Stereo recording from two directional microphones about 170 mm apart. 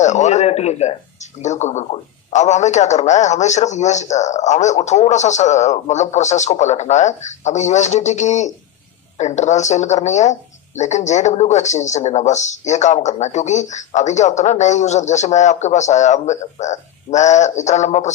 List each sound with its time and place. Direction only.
0.0 s speech: 45° left (ahead or behind)